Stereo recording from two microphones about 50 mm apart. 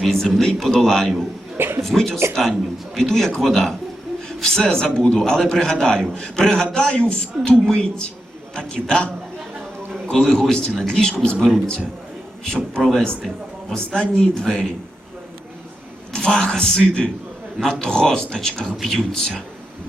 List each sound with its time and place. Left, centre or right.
0.0 s a man's voice: centre
1.5 s a sound: right
1.8 s a man's voice: centre
12.8 s a man's voice: centre
16.1 s a man's voice: centre